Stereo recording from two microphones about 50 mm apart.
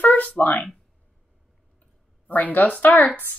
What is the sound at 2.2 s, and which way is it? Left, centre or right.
Speech, left.